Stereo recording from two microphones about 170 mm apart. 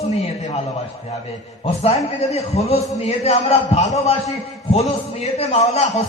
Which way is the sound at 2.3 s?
35° left (ahead or behind).